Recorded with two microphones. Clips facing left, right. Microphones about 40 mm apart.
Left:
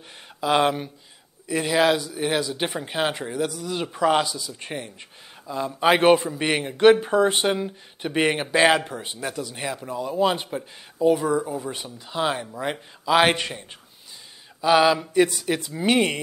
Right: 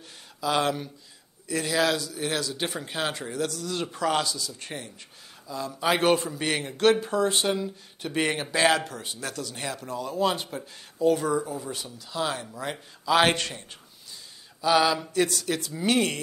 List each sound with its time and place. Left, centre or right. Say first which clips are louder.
0.4 s a man's voice: left 5 dB; left